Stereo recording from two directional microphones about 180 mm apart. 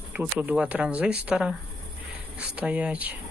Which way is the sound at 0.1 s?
10° right (ahead or behind).